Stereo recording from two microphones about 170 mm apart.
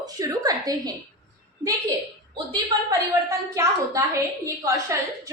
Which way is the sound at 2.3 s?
25° right (ahead or behind).